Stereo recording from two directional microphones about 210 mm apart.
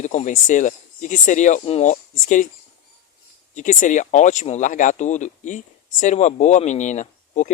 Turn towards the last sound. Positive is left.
turn(degrees=35)  # may be behind; listen again after turning